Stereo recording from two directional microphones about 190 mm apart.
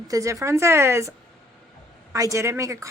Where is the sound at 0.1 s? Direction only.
15° right (ahead or behind).